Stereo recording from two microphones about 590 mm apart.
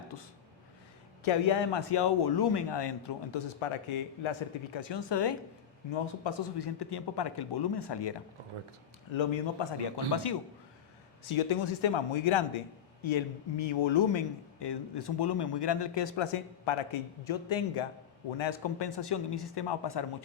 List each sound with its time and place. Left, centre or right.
0.1 s a man's voice: left
9.1 s a man's voice: left
11.3 s speech: left